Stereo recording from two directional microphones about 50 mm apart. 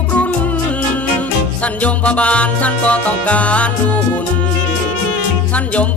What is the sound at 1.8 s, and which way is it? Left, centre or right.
Music, left.